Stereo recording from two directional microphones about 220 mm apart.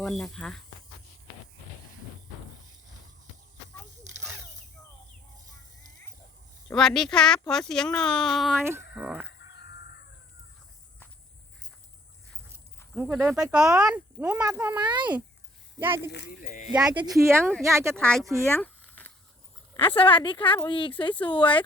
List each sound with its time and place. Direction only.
0.0 s speech: centre (ahead or behind)
6.7 s speech: centre (ahead or behind)
9.0 s chicken: 5° right (ahead or behind)
9.6 s chicken: 50° left (ahead or behind)
13.0 s speech: 10° right (ahead or behind)
16.1 s speech: 45° left (ahead or behind)
16.9 s speech: 20° right (ahead or behind)
17.9 s speech: 5° left (ahead or behind)
18.6 s a sound: 10° left (ahead or behind)
19.7 s a woman's voice: 25° left (ahead or behind)